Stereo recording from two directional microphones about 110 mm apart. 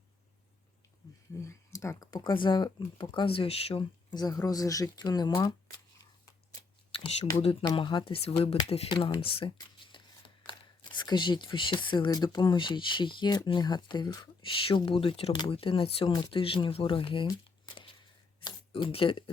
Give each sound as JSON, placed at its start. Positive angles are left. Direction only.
{"t": 1.5, "sound": "speech", "side_deg": 30}
{"t": 2.0, "sound": "speech", "side_deg": 45}
{"t": 4.1, "sound": "speech", "side_deg": 35}
{"t": 7.6, "sound": "speech", "side_deg": 40}
{"t": 9.6, "sound": "a sound", "side_deg": 50}
{"t": 10.9, "sound": "speech", "side_deg": 45}
{"t": 14.4, "sound": "speech", "side_deg": 55}
{"t": 18.3, "sound": "a sound", "side_deg": 50}